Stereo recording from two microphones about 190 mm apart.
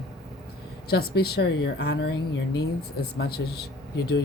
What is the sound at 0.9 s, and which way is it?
Speech, 55° left (ahead or behind).